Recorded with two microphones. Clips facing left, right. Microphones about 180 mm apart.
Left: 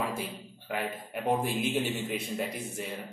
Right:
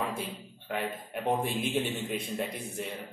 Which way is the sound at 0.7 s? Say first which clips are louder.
Even; centre (ahead or behind).